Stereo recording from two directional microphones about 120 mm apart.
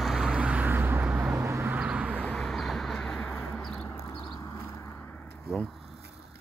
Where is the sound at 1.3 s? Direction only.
25° right (ahead or behind).